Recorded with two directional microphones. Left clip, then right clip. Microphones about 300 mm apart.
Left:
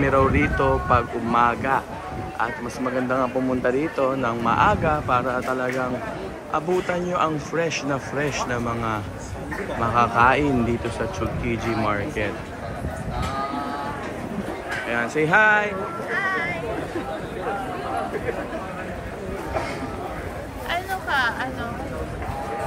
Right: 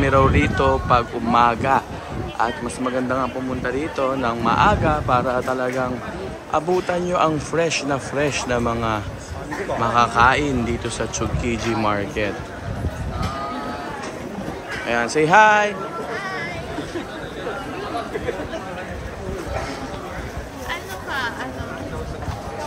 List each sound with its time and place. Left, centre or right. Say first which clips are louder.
0.0 s speech: right 2 dB; centre
3.1 s a man's voice: left 1 dB; centre
14.9 s a man's voice: right 4 dB; centre
20.7 s vehicle: left 4 dB; left